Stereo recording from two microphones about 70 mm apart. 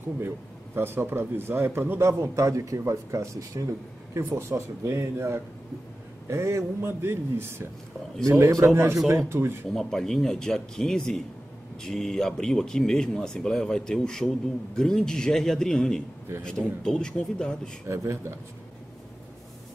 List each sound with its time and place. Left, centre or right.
0.7 s a man's voice: right
8.3 s speech: right
8.6 s a man's voice: right
9.8 s speech: centre
17.8 s speech: right